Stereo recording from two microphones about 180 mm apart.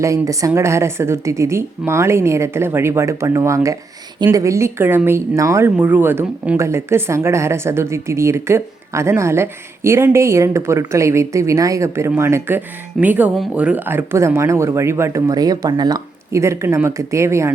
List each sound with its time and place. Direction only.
0.0 s a woman's voice: 15° right (ahead or behind)